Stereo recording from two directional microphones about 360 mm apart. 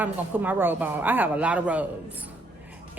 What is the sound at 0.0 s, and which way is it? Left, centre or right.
A woman's voice, centre.